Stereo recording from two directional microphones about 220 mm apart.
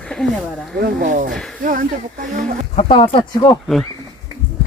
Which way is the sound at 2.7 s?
25° left (ahead or behind).